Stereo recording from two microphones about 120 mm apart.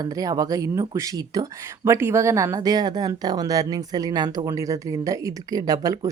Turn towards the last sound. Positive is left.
turn(degrees=-30)  # may be behind; listen again after turning